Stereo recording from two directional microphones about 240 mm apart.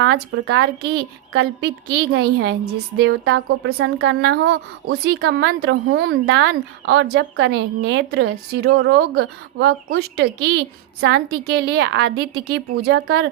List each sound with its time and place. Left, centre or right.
0.0 s a woman's voice: right